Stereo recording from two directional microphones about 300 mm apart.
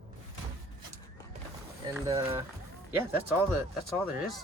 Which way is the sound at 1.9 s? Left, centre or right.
Centre.